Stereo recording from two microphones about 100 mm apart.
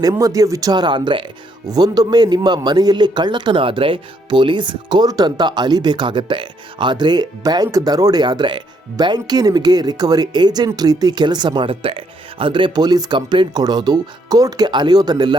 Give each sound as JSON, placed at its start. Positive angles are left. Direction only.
{"t": 0.0, "sound": "speech", "side_deg": -35}
{"t": 1.6, "sound": "speech", "side_deg": -40}